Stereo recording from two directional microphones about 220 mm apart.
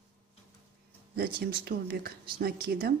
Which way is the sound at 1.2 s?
45° right (ahead or behind).